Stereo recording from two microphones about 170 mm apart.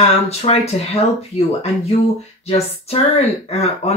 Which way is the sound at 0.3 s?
40° left (ahead or behind).